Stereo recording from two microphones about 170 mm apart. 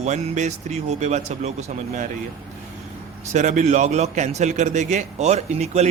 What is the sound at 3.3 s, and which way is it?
A man's voice, 45° right (ahead or behind).